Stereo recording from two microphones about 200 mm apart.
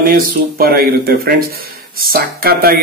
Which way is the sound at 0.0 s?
45° right (ahead or behind).